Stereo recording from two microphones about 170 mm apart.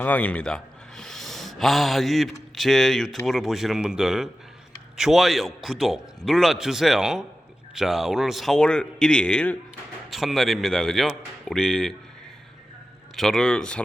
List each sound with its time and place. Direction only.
0.0 s a man's voice: 10° left (ahead or behind)
13.1 s a man's voice: centre (ahead or behind)